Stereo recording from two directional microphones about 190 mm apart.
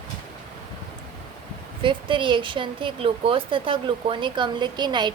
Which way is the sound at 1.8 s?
25° right (ahead or behind).